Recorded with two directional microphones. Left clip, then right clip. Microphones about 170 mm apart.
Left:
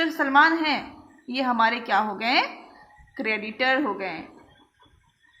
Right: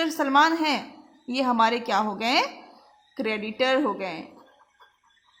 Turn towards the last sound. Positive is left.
turn(degrees=-50)  # may be behind; listen again after turning